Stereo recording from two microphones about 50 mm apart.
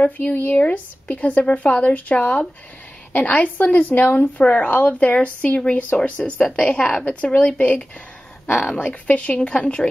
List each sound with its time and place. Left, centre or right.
0.0 s a woman's voice: left
0.7 s a woman's voice: left
8.7 s speech: left